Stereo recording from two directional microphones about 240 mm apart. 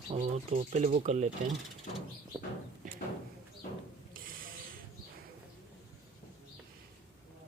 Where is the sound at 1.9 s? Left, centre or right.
Left.